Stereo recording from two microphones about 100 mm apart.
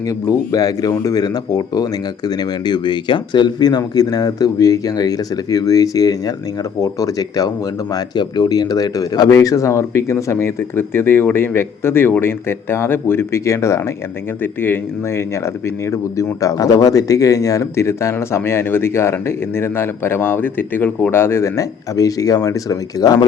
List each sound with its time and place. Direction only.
0.1 s speech: 35° left (ahead or behind)